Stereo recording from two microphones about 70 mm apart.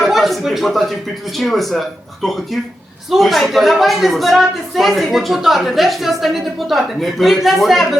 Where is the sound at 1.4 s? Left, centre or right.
Centre.